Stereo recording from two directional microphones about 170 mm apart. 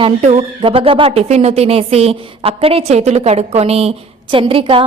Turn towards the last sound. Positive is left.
turn(degrees=-30)  # may be behind; listen again after turning